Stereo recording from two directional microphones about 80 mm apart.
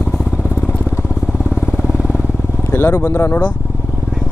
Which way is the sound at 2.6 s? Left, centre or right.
Left.